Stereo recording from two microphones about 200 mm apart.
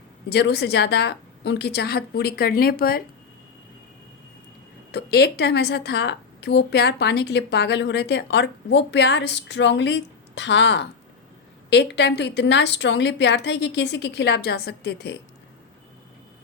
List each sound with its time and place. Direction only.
0.3 s a woman's voice: 55° left (ahead or behind)
4.9 s a woman's voice: 55° left (ahead or behind)